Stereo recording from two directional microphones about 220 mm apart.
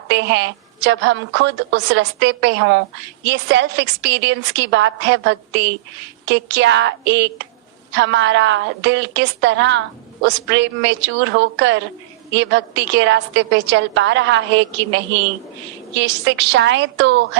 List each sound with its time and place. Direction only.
0.1 s a woman's voice: 55° right (ahead or behind)